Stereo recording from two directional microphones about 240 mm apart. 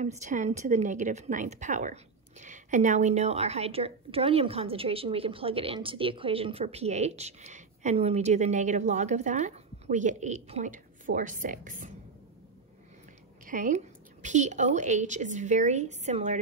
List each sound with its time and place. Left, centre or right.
0.0 s a woman's voice: right
13.5 s a woman's voice: right